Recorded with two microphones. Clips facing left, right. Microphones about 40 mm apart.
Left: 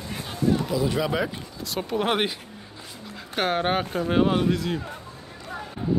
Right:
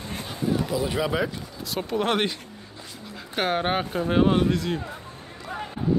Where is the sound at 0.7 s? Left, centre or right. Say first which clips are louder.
Left 1 dB; centre.